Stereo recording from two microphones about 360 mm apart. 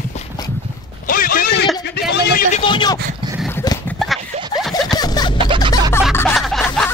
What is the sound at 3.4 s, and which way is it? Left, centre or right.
Clip-clop, centre.